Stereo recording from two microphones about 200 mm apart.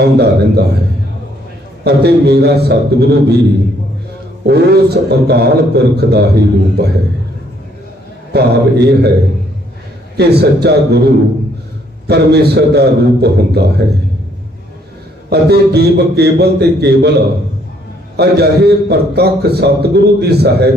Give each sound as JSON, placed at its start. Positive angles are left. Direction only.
{"t": 0.0, "sound": "a man's voice", "side_deg": -55}
{"t": 1.8, "sound": "a man's voice", "side_deg": -55}
{"t": 4.4, "sound": "a man's voice", "side_deg": -55}
{"t": 8.3, "sound": "a man's voice", "side_deg": -55}
{"t": 10.2, "sound": "a man's voice", "side_deg": -55}
{"t": 12.0, "sound": "a man's voice", "side_deg": -55}
{"t": 15.3, "sound": "a man's voice", "side_deg": -55}